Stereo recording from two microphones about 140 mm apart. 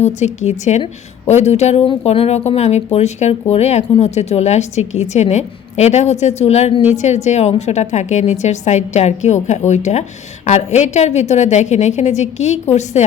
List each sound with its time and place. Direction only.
0.4 s speech: 55° left (ahead or behind)